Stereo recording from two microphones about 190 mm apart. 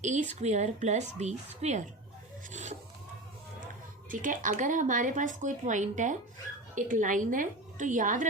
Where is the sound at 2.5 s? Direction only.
40° right (ahead or behind).